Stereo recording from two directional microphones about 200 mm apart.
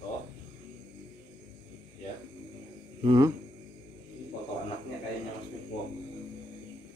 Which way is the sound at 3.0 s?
20° right (ahead or behind).